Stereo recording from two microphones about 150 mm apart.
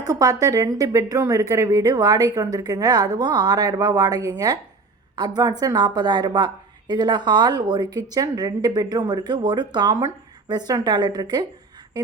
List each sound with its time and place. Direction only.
0.0 s a woman's voice: 25° right (ahead or behind)